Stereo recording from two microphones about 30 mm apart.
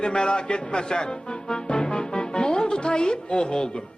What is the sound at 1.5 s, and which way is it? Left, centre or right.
Music, left.